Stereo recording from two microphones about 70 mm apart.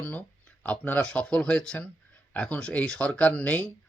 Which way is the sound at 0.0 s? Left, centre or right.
Left.